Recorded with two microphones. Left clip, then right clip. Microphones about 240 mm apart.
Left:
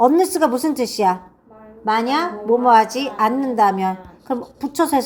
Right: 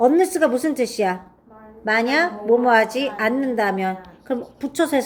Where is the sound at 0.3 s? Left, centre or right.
Centre.